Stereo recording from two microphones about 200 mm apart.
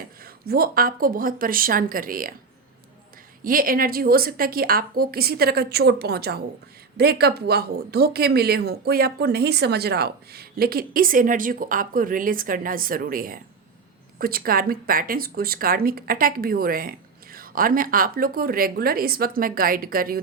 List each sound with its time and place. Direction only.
0.2 s speech: 50° right (ahead or behind)
3.4 s speech: 45° right (ahead or behind)